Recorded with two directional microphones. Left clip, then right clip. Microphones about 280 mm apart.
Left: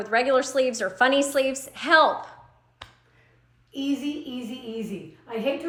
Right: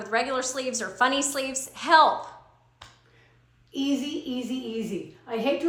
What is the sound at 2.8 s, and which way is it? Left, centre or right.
Finger snapping, left.